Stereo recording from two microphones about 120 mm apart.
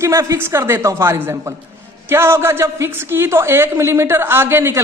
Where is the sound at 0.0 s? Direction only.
25° right (ahead or behind).